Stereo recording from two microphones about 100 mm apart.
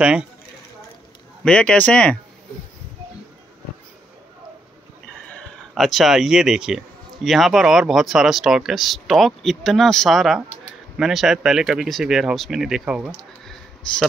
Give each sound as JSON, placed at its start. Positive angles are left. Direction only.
{"t": 0.0, "sound": "speech", "side_deg": -10}
{"t": 1.4, "sound": "speech", "side_deg": 10}
{"t": 5.8, "sound": "speech", "side_deg": 0}
{"t": 13.9, "sound": "speech", "side_deg": 10}